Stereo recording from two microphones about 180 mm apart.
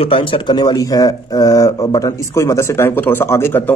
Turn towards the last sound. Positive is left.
turn(degrees=15)  # may be behind; listen again after turning